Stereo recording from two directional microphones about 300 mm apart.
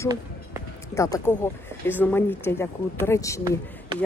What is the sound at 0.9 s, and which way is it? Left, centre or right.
Speech, centre.